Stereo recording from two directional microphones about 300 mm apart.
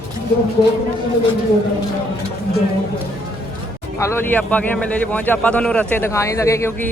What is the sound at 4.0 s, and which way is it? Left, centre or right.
A man's voice, centre.